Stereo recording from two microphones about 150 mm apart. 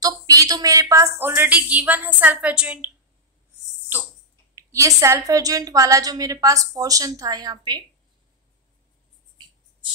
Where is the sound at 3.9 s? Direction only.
15° right (ahead or behind).